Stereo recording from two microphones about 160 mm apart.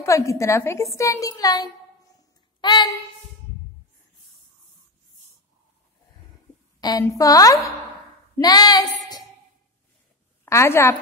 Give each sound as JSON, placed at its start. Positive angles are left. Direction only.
{"t": 0.0, "sound": "a woman's voice", "side_deg": 20}
{"t": 6.8, "sound": "a woman's voice", "side_deg": 25}
{"t": 10.4, "sound": "a woman's voice", "side_deg": 15}